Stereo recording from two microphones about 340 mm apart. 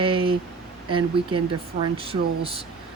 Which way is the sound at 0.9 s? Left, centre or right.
Centre.